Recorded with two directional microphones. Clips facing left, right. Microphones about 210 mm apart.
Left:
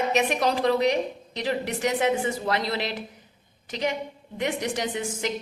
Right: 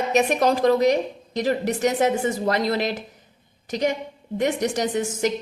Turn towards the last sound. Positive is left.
turn(degrees=-45)  # may be behind; listen again after turning